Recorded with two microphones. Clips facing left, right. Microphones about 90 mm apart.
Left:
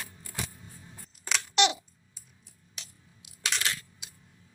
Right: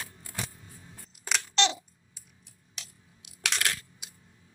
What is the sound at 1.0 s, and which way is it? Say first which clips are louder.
Scissors: right 1 dB; centre (ahead or behind).